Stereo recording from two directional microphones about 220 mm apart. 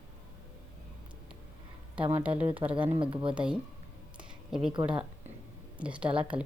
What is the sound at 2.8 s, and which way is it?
Speech, 25° right (ahead or behind).